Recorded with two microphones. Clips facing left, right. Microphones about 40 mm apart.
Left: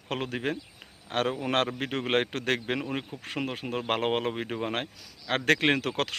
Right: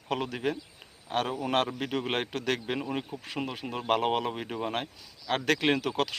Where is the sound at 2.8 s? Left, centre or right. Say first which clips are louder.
Even; left.